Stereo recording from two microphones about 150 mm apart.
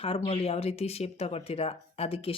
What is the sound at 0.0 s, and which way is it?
Speech, 40° left (ahead or behind).